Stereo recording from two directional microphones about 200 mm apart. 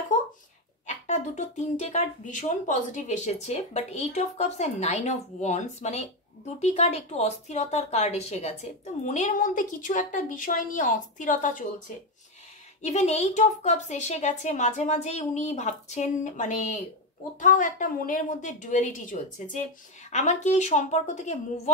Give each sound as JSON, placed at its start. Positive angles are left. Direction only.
{"t": 0.8, "sound": "speech", "side_deg": 35}
{"t": 12.8, "sound": "speech", "side_deg": 35}